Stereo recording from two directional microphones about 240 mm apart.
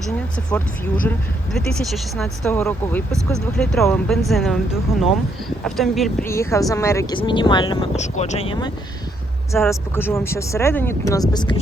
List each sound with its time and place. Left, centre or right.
1.0 s speech: centre
6.2 s speech: centre